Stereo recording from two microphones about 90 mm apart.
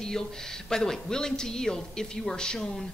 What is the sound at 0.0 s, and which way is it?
A woman's voice, 5° left (ahead or behind).